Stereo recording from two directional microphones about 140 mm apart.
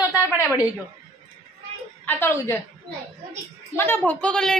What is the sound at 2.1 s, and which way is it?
Speech, 15° left (ahead or behind).